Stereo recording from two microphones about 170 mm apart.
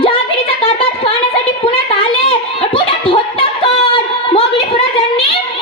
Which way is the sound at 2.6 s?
30° left (ahead or behind).